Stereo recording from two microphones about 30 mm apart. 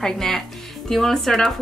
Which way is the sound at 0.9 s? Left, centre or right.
Centre.